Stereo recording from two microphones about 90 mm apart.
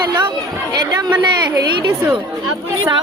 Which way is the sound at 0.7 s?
50° right (ahead or behind).